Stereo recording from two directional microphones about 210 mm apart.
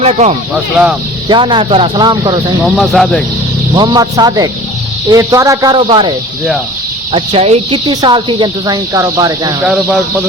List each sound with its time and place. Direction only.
0.0 s speech: 30° right (ahead or behind)
0.5 s speech: 5° right (ahead or behind)
1.3 s speech: 20° right (ahead or behind)
2.7 s speech: centre (ahead or behind)
3.8 s speech: 20° right (ahead or behind)